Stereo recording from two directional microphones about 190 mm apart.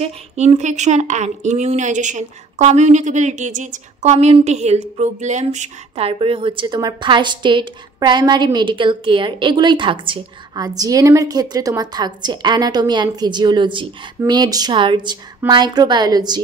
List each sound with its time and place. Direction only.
0.0 s speech: 35° right (ahead or behind)